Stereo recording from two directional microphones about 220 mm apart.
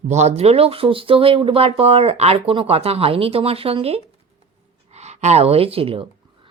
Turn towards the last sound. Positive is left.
turn(degrees=-25)  # may be behind; listen again after turning